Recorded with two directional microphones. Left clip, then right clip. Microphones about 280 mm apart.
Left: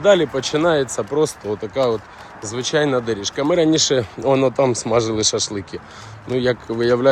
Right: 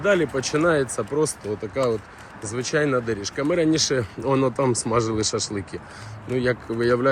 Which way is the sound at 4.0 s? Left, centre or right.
Centre.